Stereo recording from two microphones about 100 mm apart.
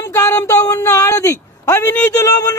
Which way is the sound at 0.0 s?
30° left (ahead or behind).